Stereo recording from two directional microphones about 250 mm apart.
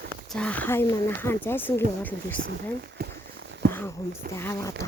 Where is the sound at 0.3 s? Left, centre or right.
Centre.